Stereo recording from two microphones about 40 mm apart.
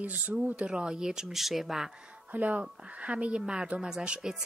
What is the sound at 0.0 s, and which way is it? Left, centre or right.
Speech, right.